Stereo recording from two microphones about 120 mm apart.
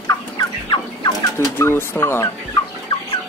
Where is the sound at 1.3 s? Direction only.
20° left (ahead or behind).